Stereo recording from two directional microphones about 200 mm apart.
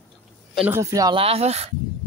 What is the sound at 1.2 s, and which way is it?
Speech, 30° right (ahead or behind).